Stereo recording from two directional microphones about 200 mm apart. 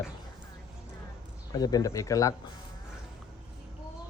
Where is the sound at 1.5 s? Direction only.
20° left (ahead or behind).